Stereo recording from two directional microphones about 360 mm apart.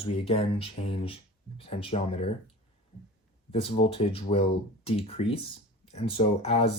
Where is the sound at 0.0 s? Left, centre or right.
Centre.